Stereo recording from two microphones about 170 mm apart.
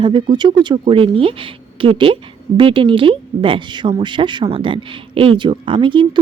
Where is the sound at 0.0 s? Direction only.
30° right (ahead or behind).